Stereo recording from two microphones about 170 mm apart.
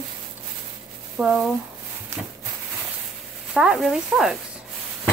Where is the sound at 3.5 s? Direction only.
5° right (ahead or behind).